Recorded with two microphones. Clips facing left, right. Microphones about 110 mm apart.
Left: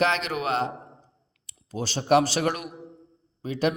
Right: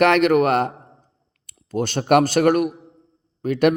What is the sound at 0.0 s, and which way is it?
A man's voice, 60° right (ahead or behind).